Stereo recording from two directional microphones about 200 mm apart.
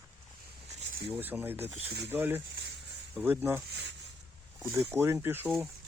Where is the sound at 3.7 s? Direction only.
60° right (ahead or behind).